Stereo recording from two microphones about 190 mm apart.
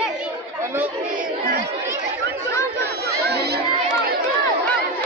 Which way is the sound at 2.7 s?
60° right (ahead or behind).